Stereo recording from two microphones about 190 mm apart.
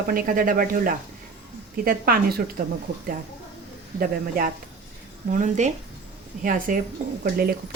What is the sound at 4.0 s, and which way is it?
Speech, 45° right (ahead or behind).